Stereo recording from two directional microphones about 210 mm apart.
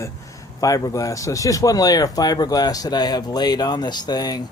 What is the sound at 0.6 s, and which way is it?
Speech, 15° left (ahead or behind).